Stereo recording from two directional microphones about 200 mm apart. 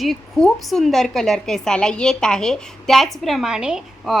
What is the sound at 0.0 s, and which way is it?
A woman's voice, centre (ahead or behind).